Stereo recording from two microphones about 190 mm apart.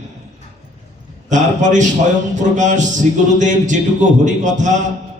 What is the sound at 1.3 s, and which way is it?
A man's voice, 40° right (ahead or behind).